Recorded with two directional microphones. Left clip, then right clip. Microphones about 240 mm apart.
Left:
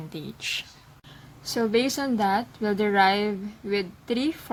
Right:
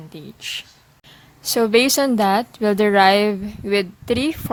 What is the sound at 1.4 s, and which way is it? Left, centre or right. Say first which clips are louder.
A woman's voice: right 8 dB; right.